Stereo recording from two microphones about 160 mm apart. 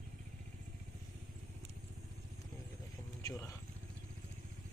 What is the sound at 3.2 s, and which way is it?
Speech, 20° left (ahead or behind).